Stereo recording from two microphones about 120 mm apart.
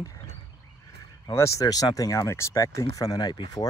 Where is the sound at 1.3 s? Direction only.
25° left (ahead or behind).